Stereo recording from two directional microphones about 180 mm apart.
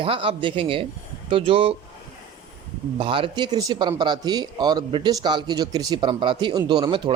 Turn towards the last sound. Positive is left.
turn(degrees=-25)  # may be behind; listen again after turning